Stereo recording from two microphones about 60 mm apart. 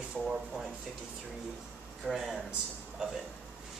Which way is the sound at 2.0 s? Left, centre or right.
Centre.